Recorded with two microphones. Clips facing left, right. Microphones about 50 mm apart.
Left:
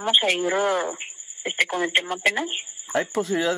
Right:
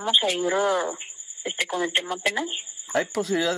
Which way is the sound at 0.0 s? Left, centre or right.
Left.